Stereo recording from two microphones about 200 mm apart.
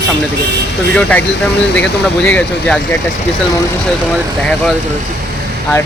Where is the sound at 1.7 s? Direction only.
5° left (ahead or behind).